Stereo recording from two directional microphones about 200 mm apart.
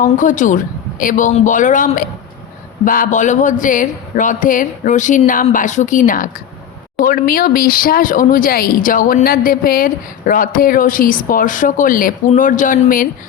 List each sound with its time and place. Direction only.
0.0 s speech: 40° left (ahead or behind)